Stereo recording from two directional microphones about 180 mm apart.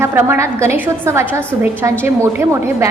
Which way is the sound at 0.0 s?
15° right (ahead or behind).